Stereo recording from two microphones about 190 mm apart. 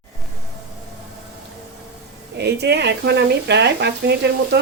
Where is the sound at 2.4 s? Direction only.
60° right (ahead or behind).